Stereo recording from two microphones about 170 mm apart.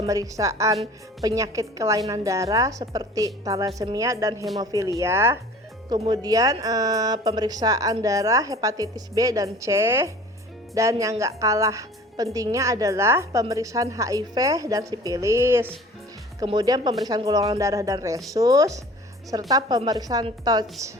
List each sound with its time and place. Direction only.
0.1 s speech: 20° right (ahead or behind)